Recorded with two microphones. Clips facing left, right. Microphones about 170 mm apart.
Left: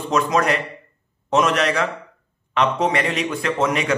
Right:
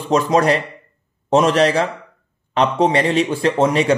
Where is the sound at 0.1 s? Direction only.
30° right (ahead or behind).